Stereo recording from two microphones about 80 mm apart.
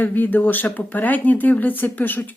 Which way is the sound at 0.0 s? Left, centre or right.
Left.